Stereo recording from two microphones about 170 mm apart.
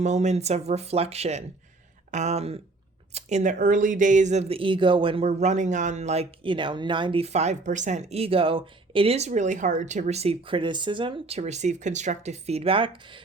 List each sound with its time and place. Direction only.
0.0 s speech: 45° right (ahead or behind)